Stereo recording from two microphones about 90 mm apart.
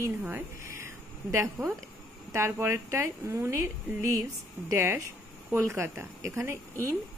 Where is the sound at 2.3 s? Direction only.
30° right (ahead or behind).